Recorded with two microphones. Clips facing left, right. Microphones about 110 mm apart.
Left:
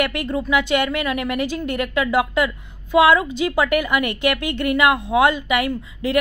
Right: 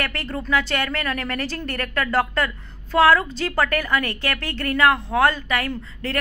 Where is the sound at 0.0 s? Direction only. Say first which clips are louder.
Left 6 dB; 15° left (ahead or behind).